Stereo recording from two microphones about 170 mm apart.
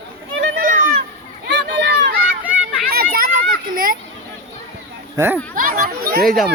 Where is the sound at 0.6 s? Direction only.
55° right (ahead or behind).